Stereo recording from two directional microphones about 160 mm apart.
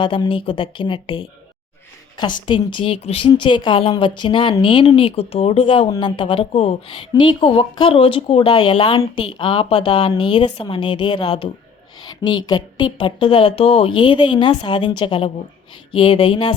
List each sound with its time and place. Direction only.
0.0 s speech: 30° left (ahead or behind)